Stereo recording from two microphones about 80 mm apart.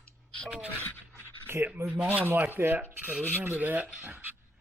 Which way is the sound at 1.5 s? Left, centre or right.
Right.